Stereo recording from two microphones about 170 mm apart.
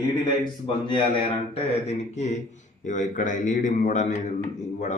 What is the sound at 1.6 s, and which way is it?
A man's voice, 40° left (ahead or behind).